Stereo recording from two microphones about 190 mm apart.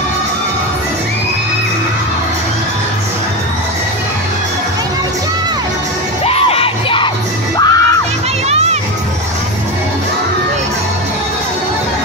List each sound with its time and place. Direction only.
6.2 s crowd: 30° left (ahead or behind)
7.5 s music: 20° left (ahead or behind)
8.5 s music: 35° right (ahead or behind)